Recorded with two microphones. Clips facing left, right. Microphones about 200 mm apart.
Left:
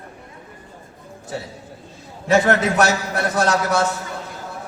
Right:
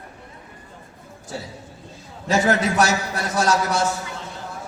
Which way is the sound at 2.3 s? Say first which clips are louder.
Left 3 dB; 60° left (ahead or behind).